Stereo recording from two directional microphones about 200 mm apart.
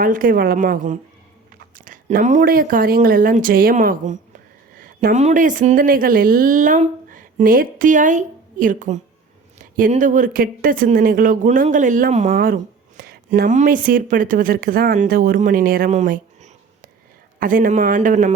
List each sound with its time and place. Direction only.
0.0 s speech: 45° right (ahead or behind)
13.0 s a sound: 50° right (ahead or behind)
13.6 s a man's voice: 45° right (ahead or behind)